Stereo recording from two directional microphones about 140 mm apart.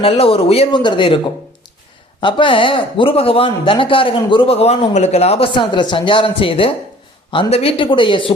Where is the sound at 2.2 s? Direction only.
35° left (ahead or behind).